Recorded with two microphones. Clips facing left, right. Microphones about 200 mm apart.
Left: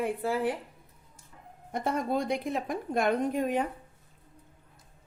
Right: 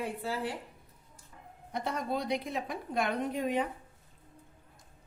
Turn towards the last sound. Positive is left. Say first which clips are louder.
# left 3 dB
turn(degrees=50)  # may be behind; listen again after turning